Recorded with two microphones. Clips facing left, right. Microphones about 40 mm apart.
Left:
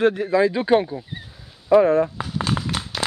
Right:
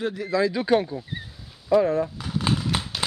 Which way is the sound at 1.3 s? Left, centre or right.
Centre.